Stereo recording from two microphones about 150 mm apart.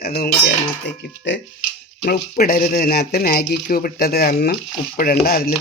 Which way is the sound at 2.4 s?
80° left.